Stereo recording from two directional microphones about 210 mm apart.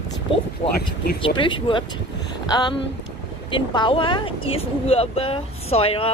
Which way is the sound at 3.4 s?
20° left (ahead or behind).